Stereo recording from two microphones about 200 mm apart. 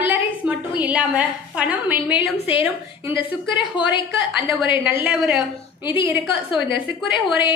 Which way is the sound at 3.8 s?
25° left (ahead or behind).